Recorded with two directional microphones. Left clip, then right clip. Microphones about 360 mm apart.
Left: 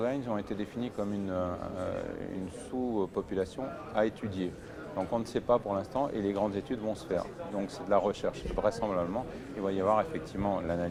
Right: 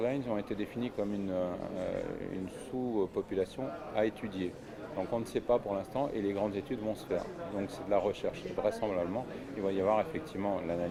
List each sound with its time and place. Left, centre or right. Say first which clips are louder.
0.0 s speech: left 1 dB; left
2.9 s speech: right 1 dB; left